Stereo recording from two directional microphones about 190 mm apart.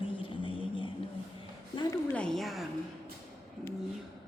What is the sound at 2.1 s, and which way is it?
Speech, 5° left (ahead or behind).